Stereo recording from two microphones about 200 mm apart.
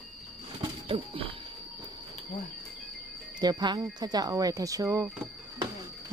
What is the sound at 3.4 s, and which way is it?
A woman's voice, 20° right (ahead or behind).